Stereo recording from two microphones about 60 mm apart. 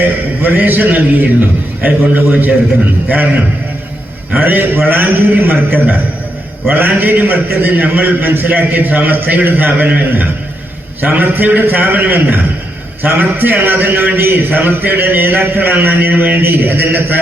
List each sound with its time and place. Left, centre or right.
0.4 s a man's voice: right